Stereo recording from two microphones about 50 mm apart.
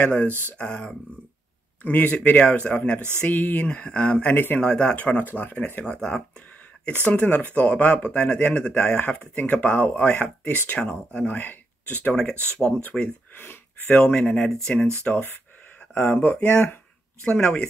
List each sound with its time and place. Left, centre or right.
0.0 s speech: left
1.8 s speech: left
3.2 s speech: left
3.6 s speech: left
4.3 s speech: left
4.6 s speech: left
5.2 s speech: left
5.9 s speech: centre
6.9 s speech: left
12.2 s speech: centre
13.4 s a sound: left
13.9 s speech: left
17.2 s speech: centre